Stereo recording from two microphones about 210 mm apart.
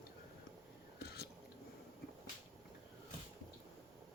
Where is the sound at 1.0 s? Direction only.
50° left (ahead or behind).